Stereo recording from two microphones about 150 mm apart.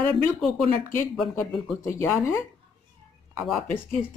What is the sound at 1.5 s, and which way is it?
Speech, centre (ahead or behind).